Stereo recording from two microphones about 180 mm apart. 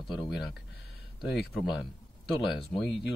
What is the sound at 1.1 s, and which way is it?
Speech, 5° right (ahead or behind).